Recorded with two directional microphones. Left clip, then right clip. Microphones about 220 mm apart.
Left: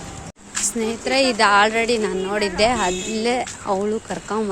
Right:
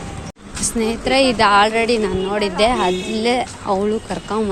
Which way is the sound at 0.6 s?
15° left (ahead or behind).